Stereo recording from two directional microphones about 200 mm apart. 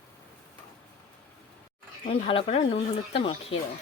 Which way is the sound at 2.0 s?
25° left (ahead or behind).